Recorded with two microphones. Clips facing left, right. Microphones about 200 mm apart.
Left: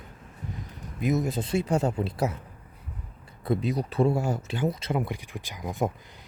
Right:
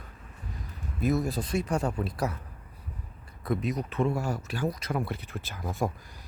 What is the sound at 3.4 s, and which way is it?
Speech, 30° left (ahead or behind).